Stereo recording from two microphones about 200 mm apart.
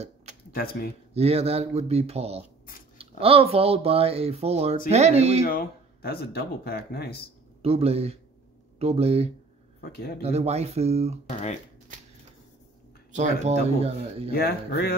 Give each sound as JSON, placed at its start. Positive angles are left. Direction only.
{"t": 0.0, "sound": "a sound", "side_deg": -35}
{"t": 0.5, "sound": "speech", "side_deg": 50}
{"t": 1.1, "sound": "speech", "side_deg": -30}
{"t": 5.4, "sound": "speech", "side_deg": 45}
{"t": 7.6, "sound": "speech", "side_deg": -30}
{"t": 11.2, "sound": "speech", "side_deg": 35}
{"t": 13.1, "sound": "speech", "side_deg": -35}
{"t": 14.3, "sound": "speech", "side_deg": 50}